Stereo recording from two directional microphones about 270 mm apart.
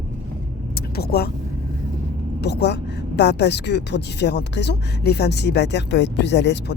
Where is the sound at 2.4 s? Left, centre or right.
Left.